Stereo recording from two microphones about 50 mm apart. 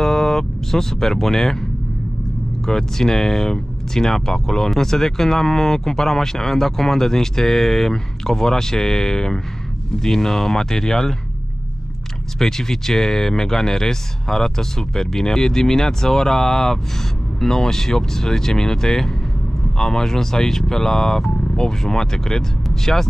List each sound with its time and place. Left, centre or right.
0.0 s speech: centre
2.6 s speech: centre
12.4 s speech: centre